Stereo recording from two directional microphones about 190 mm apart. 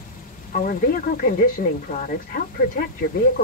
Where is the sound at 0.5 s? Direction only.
50° left (ahead or behind).